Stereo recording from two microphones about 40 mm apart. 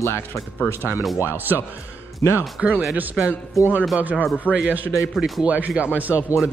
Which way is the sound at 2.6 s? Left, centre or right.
Right.